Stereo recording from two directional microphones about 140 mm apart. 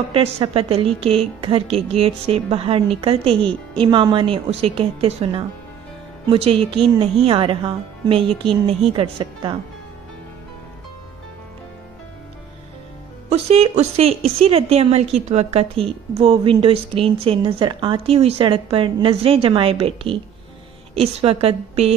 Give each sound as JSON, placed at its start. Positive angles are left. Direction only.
{"t": 0.1, "sound": "a woman's voice", "side_deg": -40}
{"t": 13.3, "sound": "a woman's voice", "side_deg": -50}